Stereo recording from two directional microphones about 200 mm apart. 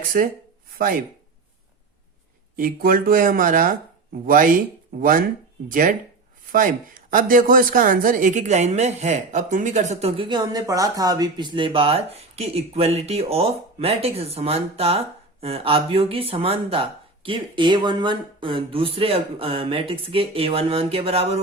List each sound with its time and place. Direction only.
0.1 s speech: 45° right (ahead or behind)
2.6 s speech: 45° right (ahead or behind); by 21.3 s 30° right (ahead or behind)